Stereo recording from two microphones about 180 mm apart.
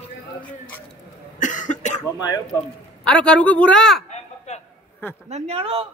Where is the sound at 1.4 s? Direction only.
45° left (ahead or behind).